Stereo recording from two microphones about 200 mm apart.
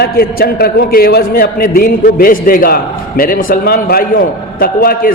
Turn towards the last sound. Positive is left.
turn(degrees=45)  # may be behind; listen again after turning